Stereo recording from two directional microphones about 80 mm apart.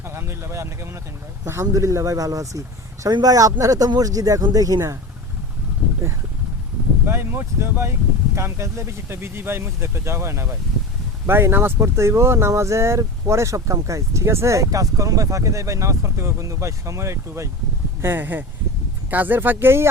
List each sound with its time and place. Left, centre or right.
0.0 s speech: right
7.0 s speech: right
18.0 s speech: right